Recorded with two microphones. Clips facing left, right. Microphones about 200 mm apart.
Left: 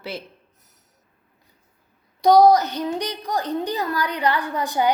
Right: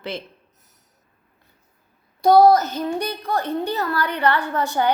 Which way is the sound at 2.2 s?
15° left (ahead or behind).